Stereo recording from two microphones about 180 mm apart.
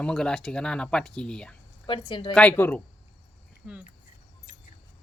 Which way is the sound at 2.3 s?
10° left (ahead or behind).